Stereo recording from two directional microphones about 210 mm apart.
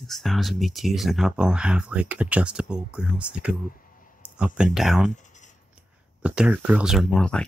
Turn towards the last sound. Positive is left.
turn(degrees=5)  # may be behind; listen again after turning